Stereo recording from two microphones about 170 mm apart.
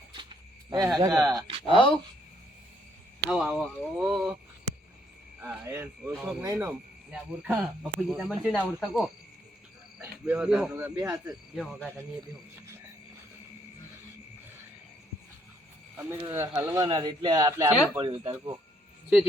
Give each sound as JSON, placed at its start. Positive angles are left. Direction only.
{"t": 0.1, "sound": "a sound", "side_deg": -30}
{"t": 1.2, "sound": "speech", "side_deg": -20}
{"t": 1.6, "sound": "speech", "side_deg": 30}
{"t": 3.2, "sound": "speech", "side_deg": -5}
{"t": 5.4, "sound": "speech", "side_deg": -10}
{"t": 7.1, "sound": "speech", "side_deg": -5}
{"t": 10.7, "sound": "speech", "side_deg": -15}
{"t": 11.5, "sound": "speech", "side_deg": 5}
{"t": 16.0, "sound": "speech", "side_deg": -15}